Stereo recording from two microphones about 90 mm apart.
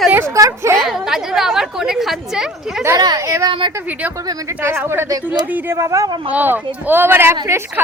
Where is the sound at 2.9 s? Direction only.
50° right (ahead or behind).